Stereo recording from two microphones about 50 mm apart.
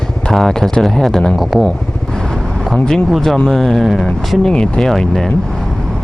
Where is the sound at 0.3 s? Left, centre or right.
Centre.